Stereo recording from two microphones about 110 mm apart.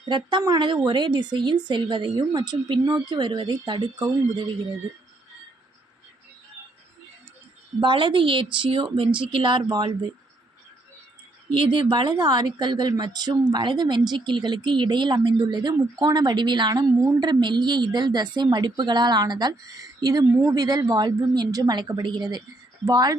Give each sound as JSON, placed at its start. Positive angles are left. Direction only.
{"t": 0.1, "sound": "speech", "side_deg": -40}
{"t": 7.8, "sound": "speech", "side_deg": -45}
{"t": 11.5, "sound": "speech", "side_deg": -45}